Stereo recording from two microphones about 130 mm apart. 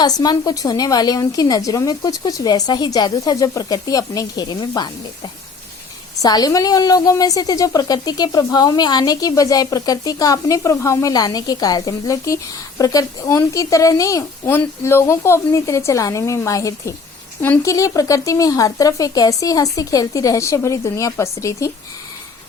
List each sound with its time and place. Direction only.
0.0 s a woman's voice: 30° left (ahead or behind)